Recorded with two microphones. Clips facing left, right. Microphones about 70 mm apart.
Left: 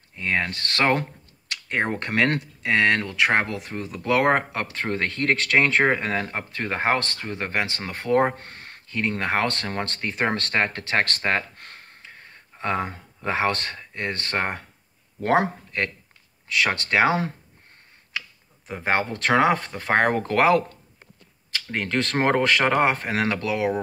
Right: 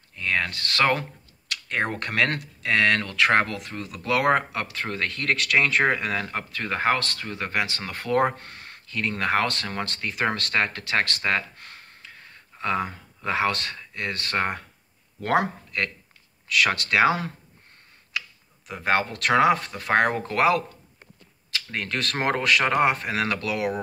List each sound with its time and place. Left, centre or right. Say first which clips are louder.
0.1 s speech: left 1 dB; left
18.7 s speech: even; left
21.5 s speech: left 2 dB; left